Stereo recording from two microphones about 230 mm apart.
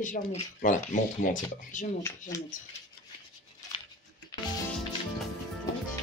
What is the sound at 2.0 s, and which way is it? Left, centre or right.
Speech, centre.